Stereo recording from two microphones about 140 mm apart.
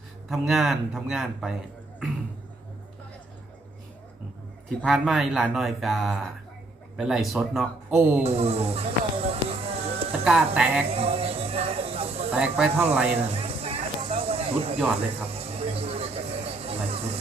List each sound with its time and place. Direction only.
0.3 s speech: centre (ahead or behind)
4.8 s speech: centre (ahead or behind)
7.9 s speech: 10° right (ahead or behind)
8.2 s speech: 50° right (ahead or behind)
10.1 s speech: 10° right (ahead or behind)
10.8 s a sound: 45° right (ahead or behind)
12.3 s speech: 10° right (ahead or behind)
13.1 s a sound: 45° right (ahead or behind)
14.8 s speech: 15° right (ahead or behind)
15.4 s vehicle: 45° right (ahead or behind)